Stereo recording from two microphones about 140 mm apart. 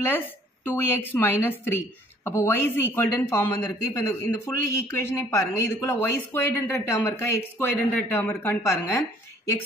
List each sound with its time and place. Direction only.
0.0 s speech: 15° left (ahead or behind)